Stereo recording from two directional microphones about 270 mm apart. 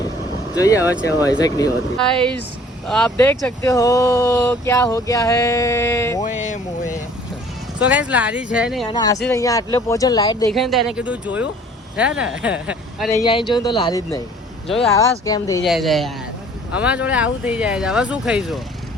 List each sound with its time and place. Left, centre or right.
0.5 s speech: centre
2.8 s speech: centre
6.2 s speech: left
7.8 s speech: centre
8.9 s speech: centre
10.5 s speech: centre
13.1 s speech: centre
15.6 s speech: centre